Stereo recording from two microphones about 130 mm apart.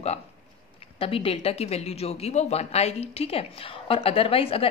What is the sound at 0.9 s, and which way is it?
Speech, 45° left (ahead or behind).